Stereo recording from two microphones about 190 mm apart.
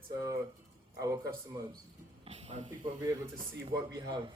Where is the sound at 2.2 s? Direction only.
35° right (ahead or behind).